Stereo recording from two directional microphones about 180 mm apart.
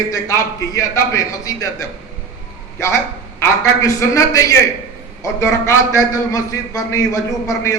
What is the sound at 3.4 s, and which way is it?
A man's voice, 15° left (ahead or behind).